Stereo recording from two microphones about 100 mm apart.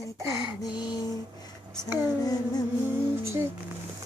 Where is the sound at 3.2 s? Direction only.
25° right (ahead or behind).